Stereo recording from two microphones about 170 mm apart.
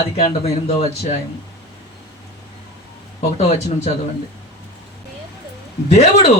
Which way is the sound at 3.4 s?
40° left (ahead or behind).